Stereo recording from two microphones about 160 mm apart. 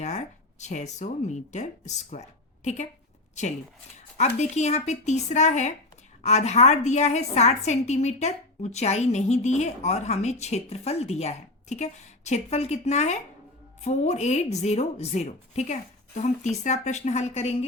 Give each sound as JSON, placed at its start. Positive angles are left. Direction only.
{"t": 0.0, "sound": "speech", "side_deg": 45}
{"t": 4.2, "sound": "a woman's voice", "side_deg": 45}